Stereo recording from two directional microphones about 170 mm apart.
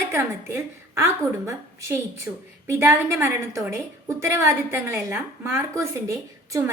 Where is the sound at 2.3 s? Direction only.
15° right (ahead or behind).